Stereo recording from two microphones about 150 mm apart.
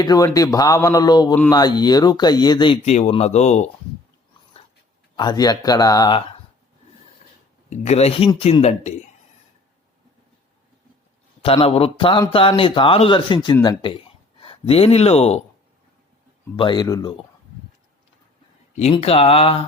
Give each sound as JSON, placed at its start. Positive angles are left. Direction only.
{"t": 0.0, "sound": "speech", "side_deg": 25}
{"t": 2.8, "sound": "speech", "side_deg": 45}
{"t": 5.1, "sound": "speech", "side_deg": 30}
{"t": 7.7, "sound": "speech", "side_deg": 45}
{"t": 11.4, "sound": "a man's voice", "side_deg": 40}
{"t": 16.6, "sound": "speech", "side_deg": 30}
{"t": 18.8, "sound": "a man's voice", "side_deg": 40}